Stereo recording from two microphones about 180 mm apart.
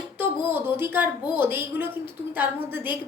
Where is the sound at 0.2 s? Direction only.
10° right (ahead or behind).